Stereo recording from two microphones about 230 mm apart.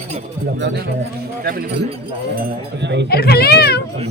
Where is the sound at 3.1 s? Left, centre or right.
Left.